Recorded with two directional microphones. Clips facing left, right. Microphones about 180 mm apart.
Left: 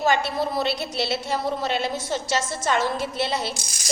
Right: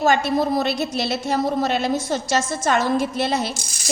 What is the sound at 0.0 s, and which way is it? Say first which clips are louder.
A woman's voice: right 4 dB; 45° right (ahead or behind).